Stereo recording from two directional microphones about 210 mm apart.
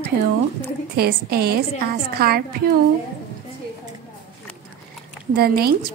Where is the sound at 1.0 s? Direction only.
45° right (ahead or behind).